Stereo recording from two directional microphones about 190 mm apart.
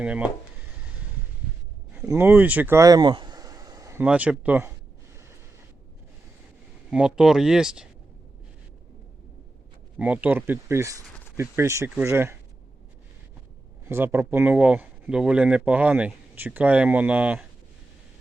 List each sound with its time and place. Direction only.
0.0 s speech: 5° right (ahead or behind)
2.0 s speech: 10° right (ahead or behind)
4.0 s speech: 5° right (ahead or behind)
6.9 s speech: 5° right (ahead or behind)
10.0 s speech: 10° right (ahead or behind)
13.8 s speech: 10° right (ahead or behind)